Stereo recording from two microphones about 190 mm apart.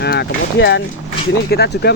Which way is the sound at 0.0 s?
60° left (ahead or behind).